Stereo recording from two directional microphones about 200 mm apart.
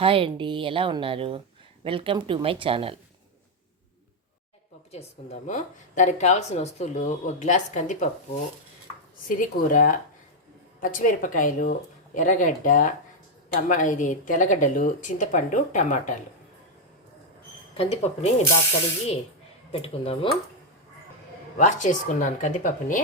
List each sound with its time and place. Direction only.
0.0 s a woman's voice: 25° right (ahead or behind)
4.9 s speech: 30° left (ahead or behind)
9.3 s speech: 45° left (ahead or behind)
17.7 s speech: 30° left (ahead or behind)
19.7 s speech: 30° left (ahead or behind)
21.6 s speech: 40° left (ahead or behind)